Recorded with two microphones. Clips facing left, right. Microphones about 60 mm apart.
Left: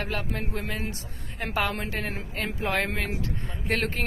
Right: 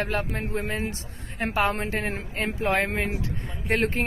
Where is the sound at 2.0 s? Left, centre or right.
Right.